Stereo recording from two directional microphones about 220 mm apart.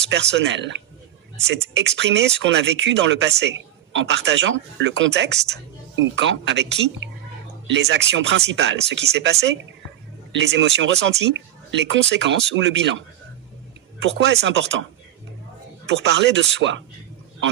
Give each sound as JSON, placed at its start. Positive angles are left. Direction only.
{"t": 0.1, "sound": "speech", "side_deg": -50}
{"t": 14.0, "sound": "speech", "side_deg": -50}
{"t": 15.9, "sound": "speech", "side_deg": -50}